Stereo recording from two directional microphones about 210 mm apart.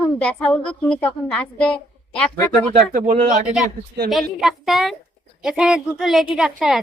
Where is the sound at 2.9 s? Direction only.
40° right (ahead or behind).